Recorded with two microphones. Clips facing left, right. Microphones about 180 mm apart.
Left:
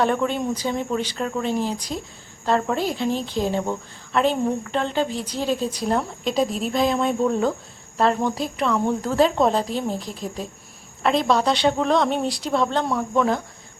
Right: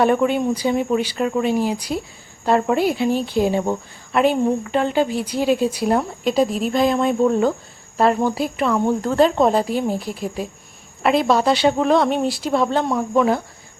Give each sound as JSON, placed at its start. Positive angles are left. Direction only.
{"t": 0.0, "sound": "a woman's voice", "side_deg": -10}